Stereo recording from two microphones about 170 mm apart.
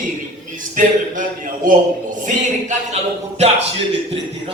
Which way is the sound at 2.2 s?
40° right (ahead or behind).